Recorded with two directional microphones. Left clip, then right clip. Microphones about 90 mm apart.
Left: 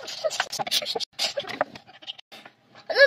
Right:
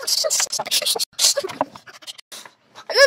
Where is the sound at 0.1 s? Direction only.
35° left (ahead or behind).